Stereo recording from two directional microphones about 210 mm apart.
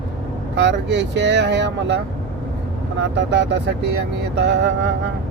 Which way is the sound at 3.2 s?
55° right (ahead or behind).